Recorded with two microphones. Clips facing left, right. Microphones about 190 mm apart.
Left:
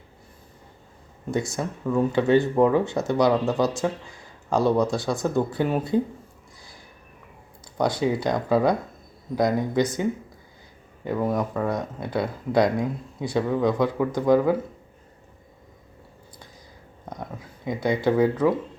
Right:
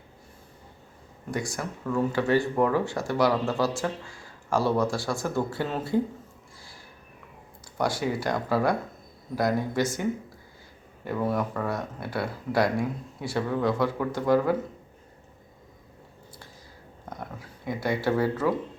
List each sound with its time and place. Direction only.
1.3 s speech: 25° left (ahead or behind)
7.8 s speech: 20° left (ahead or behind)
17.7 s speech: 20° left (ahead or behind)